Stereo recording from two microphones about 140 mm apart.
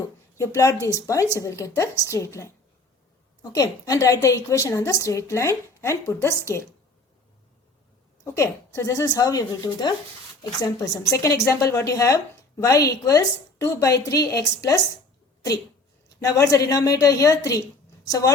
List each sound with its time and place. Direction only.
0.0 s a woman's voice: 20° left (ahead or behind)
3.5 s a woman's voice: 25° left (ahead or behind)
8.2 s a woman's voice: 20° left (ahead or behind)
16.0 s a woman's voice: 25° left (ahead or behind)